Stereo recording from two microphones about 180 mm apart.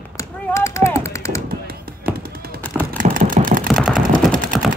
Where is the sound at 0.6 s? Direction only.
15° left (ahead or behind).